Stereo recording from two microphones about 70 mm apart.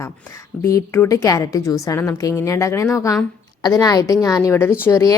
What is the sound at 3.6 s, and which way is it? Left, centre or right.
A woman's voice, left.